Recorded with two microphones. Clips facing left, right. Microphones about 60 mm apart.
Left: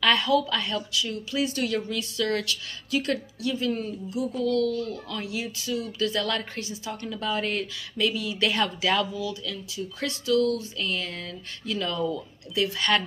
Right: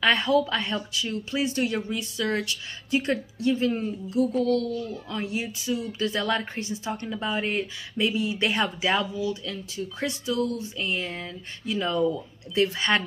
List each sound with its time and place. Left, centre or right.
0.0 s speech: right
4.1 s a sound: right
4.8 s speech: right